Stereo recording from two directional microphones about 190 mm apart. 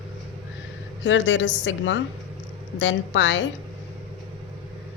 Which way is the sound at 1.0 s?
75° left (ahead or behind).